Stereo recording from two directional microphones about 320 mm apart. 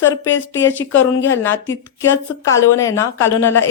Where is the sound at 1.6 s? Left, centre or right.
Left.